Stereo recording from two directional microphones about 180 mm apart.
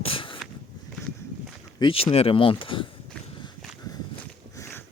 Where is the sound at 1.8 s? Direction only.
30° left (ahead or behind).